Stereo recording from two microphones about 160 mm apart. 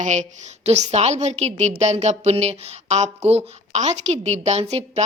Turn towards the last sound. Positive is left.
turn(degrees=-40)  # may be behind; listen again after turning